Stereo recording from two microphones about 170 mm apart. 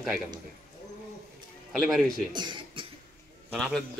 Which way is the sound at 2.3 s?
25° right (ahead or behind).